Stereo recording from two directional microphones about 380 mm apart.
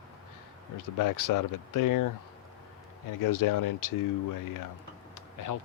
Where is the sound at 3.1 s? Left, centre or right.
Left.